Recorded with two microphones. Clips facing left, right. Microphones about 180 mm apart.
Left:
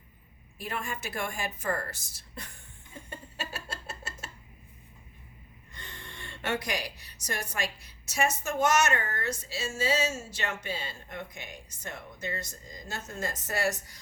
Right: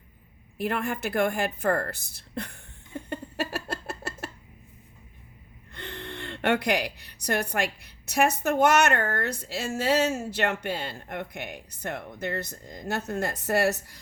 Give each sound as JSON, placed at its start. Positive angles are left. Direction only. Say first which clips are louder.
{"t": 0.6, "sound": "a woman's voice", "louder": "right 8 dB", "side_deg": -60}
{"t": 5.7, "sound": "a woman's voice", "louder": "right 10 dB", "side_deg": -60}